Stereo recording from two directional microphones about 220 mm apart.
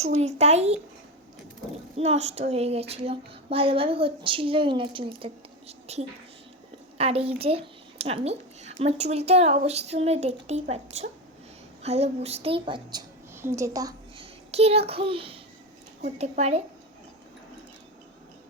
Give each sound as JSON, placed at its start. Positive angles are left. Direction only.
{"t": 0.0, "sound": "a child's voice", "side_deg": -30}
{"t": 2.0, "sound": "a child's voice", "side_deg": -30}
{"t": 14.5, "sound": "a child's voice", "side_deg": -30}